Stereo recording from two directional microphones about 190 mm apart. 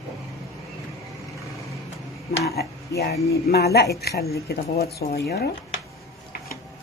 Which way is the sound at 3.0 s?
55° left (ahead or behind).